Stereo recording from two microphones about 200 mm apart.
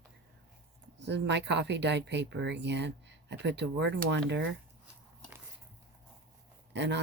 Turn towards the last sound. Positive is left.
turn(degrees=-60)  # may be behind; listen again after turning